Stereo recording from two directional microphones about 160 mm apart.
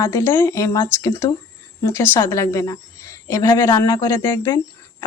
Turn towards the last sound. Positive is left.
turn(degrees=25)  # may be behind; listen again after turning